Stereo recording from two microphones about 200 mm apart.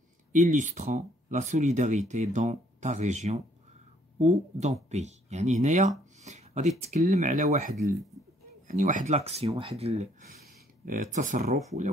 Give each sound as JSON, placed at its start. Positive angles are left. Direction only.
{"t": 0.3, "sound": "speech", "side_deg": -35}